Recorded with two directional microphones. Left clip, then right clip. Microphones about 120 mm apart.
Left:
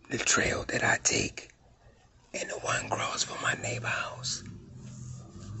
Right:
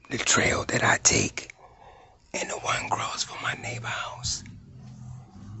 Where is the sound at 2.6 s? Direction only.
10° right (ahead or behind).